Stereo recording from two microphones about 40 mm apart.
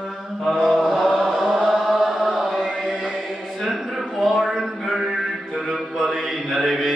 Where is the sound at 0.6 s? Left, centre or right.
Centre.